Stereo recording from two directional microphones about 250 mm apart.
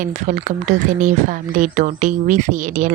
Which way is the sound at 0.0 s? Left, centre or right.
Right.